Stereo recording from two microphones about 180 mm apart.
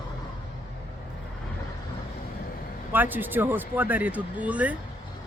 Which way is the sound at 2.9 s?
10° right (ahead or behind).